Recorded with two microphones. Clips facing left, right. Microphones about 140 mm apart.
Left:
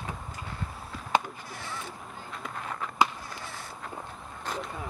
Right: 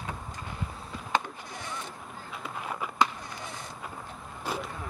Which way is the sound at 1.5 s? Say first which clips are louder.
Right 1 dB; 20° right (ahead or behind).